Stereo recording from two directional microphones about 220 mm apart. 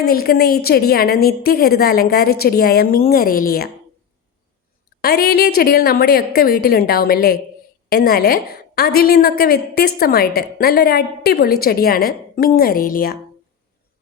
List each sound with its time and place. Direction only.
0.0 s a woman's voice: 45° left (ahead or behind)
4.9 s a woman's voice: 45° left (ahead or behind)